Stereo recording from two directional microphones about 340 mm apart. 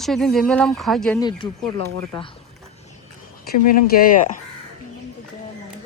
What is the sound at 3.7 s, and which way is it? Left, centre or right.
Speech, left.